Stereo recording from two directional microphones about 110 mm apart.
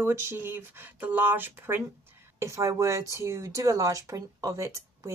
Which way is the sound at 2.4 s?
30° right (ahead or behind).